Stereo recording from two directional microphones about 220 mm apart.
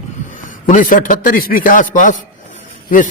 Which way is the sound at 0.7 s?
35° left (ahead or behind).